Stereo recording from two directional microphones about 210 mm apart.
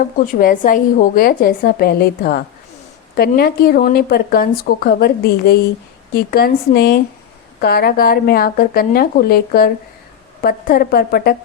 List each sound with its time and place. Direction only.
0.0 s speech: 40° left (ahead or behind)